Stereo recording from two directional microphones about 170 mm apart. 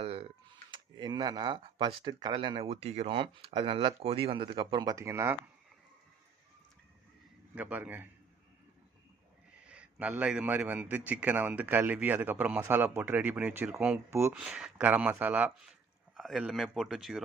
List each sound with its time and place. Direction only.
0.0 s typing: 35° right (ahead or behind)
0.7 s speech: 25° right (ahead or behind)
7.5 s a man's voice: 10° right (ahead or behind)
9.6 s a man's voice: 5° right (ahead or behind)